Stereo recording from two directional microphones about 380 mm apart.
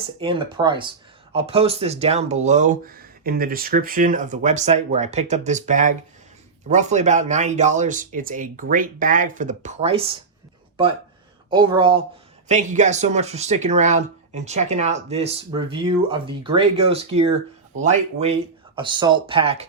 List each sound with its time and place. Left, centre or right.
0.2 s speech: centre
11.4 s speech: centre